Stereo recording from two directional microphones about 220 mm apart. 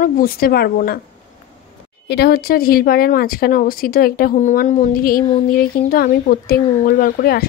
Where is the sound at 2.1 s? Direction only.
45° left (ahead or behind).